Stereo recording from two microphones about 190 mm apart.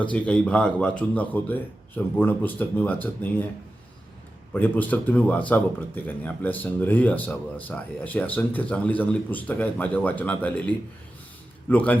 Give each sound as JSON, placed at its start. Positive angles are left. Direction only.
{"t": 0.1, "sound": "speech", "side_deg": 5}
{"t": 4.5, "sound": "speech", "side_deg": 10}